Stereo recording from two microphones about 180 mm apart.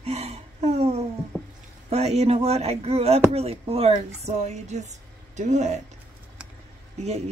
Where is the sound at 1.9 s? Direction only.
35° right (ahead or behind).